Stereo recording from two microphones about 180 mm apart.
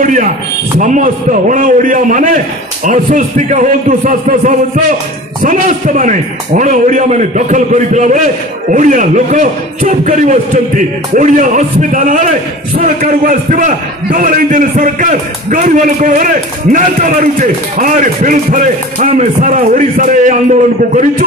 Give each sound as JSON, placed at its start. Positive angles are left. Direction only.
{"t": 0.0, "sound": "a man's voice", "side_deg": -45}